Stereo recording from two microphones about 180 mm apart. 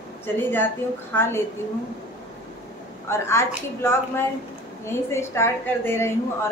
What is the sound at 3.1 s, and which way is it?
A woman's voice, 15° left (ahead or behind).